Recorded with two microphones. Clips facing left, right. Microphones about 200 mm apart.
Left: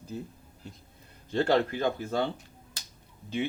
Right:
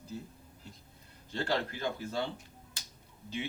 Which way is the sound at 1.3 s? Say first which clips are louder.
Left 8 dB; 55° left (ahead or behind).